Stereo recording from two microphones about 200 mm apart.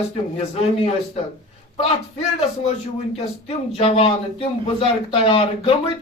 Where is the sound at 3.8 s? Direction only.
30° left (ahead or behind).